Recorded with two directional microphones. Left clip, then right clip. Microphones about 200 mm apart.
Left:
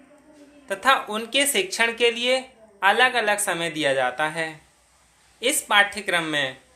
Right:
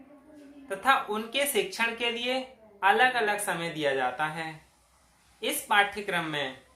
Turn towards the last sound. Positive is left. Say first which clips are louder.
# left 7 dB
turn(degrees=40)  # may be behind; listen again after turning